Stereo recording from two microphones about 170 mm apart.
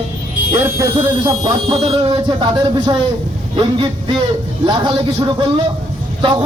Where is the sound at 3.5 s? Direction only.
30° right (ahead or behind).